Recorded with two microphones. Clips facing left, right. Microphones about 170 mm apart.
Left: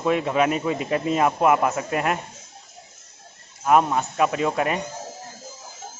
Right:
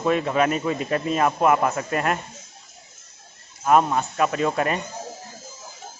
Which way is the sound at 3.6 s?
10° left (ahead or behind).